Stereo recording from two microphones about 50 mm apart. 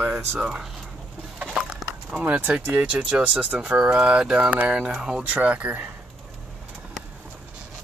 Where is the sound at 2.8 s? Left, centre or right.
Right.